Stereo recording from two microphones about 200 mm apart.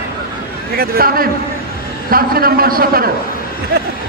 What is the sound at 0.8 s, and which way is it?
A man's voice, 50° right (ahead or behind).